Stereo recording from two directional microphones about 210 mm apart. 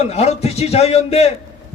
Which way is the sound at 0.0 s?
30° left (ahead or behind).